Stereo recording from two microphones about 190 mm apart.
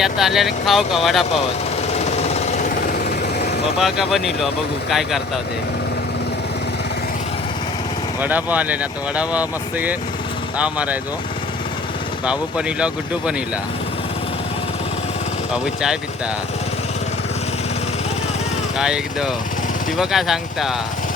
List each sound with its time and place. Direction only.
0.0 s speech: centre (ahead or behind)
1.9 s jackhammer: 35° left (ahead or behind)
3.8 s speech: centre (ahead or behind)
8.2 s speech: 10° right (ahead or behind)
12.2 s speech: 5° right (ahead or behind)
15.5 s speech: 5° right (ahead or behind)
18.8 s speech: 5° right (ahead or behind)